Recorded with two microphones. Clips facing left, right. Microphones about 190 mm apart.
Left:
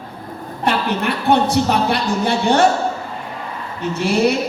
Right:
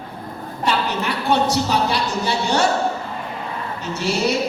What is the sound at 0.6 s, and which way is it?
Speech, 55° left (ahead or behind).